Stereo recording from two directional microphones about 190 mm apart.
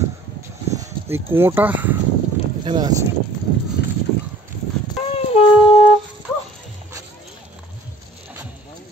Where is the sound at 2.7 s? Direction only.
20° right (ahead or behind).